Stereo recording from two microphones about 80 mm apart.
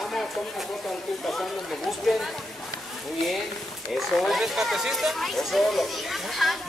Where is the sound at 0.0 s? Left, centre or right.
Centre.